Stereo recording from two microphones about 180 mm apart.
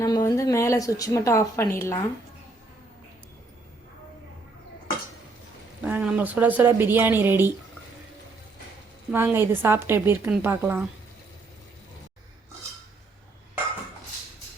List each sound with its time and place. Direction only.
0.0 s a woman's voice: 20° left (ahead or behind)
5.8 s speech: 5° right (ahead or behind)
9.1 s speech: 15° right (ahead or behind)